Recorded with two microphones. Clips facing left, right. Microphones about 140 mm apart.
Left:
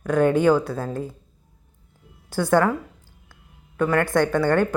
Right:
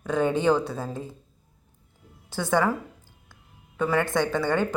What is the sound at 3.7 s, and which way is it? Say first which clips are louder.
Speech: left 4 dB; 10° right (ahead or behind).